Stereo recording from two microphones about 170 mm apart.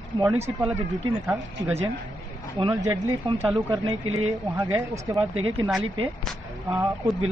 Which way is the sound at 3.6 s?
30° right (ahead or behind).